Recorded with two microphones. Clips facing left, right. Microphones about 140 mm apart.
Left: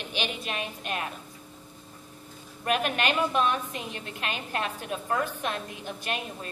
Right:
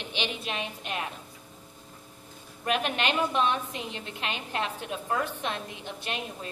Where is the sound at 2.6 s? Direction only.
20° right (ahead or behind).